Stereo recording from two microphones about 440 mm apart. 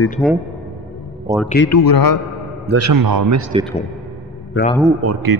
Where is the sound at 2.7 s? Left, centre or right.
Right.